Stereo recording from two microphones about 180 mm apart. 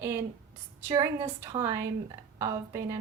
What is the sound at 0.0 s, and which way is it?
A woman's voice, 15° right (ahead or behind).